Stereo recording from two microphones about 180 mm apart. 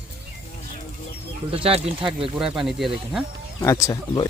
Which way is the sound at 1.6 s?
30° right (ahead or behind).